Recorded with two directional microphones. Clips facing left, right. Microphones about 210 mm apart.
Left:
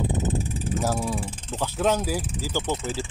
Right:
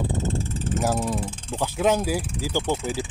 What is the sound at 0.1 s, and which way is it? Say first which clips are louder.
Vehicle: even; 20° left (ahead or behind).